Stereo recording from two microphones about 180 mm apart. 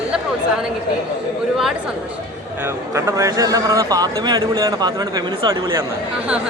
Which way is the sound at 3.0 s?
15° right (ahead or behind).